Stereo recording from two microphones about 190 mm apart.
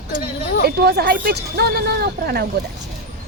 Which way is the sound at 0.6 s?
60° right (ahead or behind).